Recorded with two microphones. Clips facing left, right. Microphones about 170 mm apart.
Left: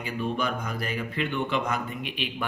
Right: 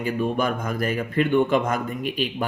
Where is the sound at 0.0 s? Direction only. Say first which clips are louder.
Right 6 dB; 50° right (ahead or behind).